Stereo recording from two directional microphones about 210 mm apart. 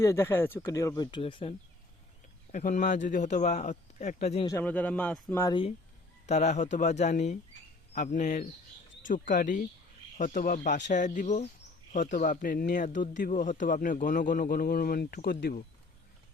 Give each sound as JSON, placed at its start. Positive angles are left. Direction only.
{"t": 0.0, "sound": "speech", "side_deg": 15}
{"t": 2.5, "sound": "speech", "side_deg": 35}
{"t": 4.4, "sound": "speech", "side_deg": 10}
{"t": 6.2, "sound": "speech", "side_deg": 35}